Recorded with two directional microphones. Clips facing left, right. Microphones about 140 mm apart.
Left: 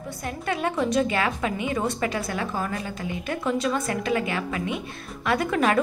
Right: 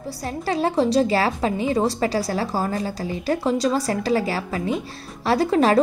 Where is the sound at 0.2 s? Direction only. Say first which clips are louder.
Right 4 dB; 30° right (ahead or behind).